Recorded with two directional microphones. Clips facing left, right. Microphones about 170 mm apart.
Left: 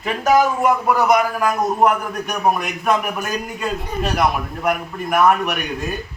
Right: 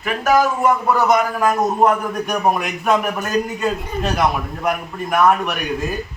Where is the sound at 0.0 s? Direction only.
20° left (ahead or behind).